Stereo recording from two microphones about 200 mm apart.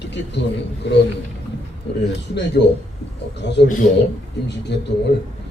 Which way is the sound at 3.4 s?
60° left (ahead or behind).